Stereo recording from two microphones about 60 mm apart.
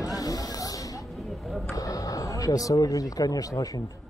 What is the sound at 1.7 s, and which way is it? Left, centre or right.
Speech, left.